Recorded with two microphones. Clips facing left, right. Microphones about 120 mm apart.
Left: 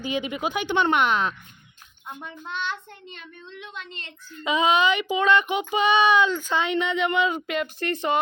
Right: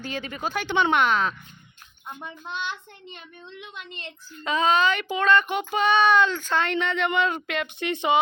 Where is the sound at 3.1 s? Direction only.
15° right (ahead or behind).